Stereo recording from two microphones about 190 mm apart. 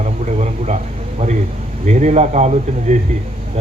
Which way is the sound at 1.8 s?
35° right (ahead or behind).